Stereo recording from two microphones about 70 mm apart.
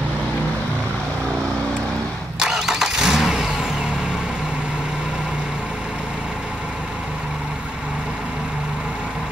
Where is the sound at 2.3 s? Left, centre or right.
Centre.